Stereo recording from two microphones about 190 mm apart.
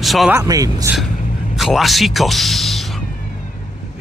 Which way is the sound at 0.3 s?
20° right (ahead or behind).